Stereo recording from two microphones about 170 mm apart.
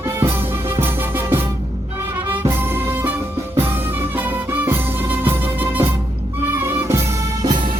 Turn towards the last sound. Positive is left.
turn(degrees=-20)  # may be behind; listen again after turning